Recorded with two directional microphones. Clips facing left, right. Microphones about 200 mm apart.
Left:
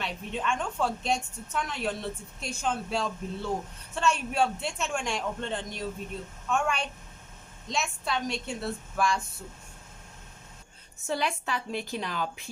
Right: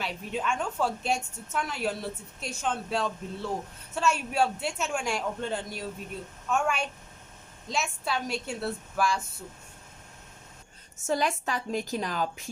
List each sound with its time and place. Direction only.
0.0 s a woman's voice: 5° right (ahead or behind)
11.0 s a woman's voice: 45° right (ahead or behind)